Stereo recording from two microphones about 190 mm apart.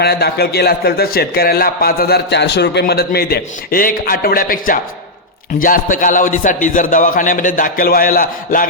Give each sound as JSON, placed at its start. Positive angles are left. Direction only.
{"t": 0.0, "sound": "a man's voice", "side_deg": 55}